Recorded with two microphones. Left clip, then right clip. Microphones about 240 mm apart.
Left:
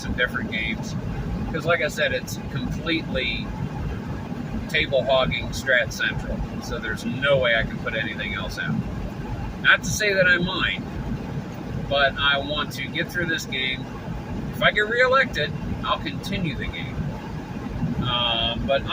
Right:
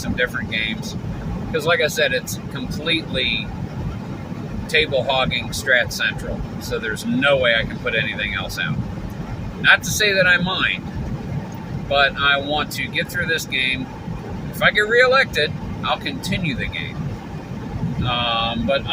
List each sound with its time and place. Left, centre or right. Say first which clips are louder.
0.2 s speech: right 3 dB; centre
4.7 s speech: right 2 dB; centre
7.2 s speech: right 3 dB; centre
9.6 s speech: right 4 dB; centre
11.9 s speech: right 4 dB; centre
18.0 s speech: right 2 dB; centre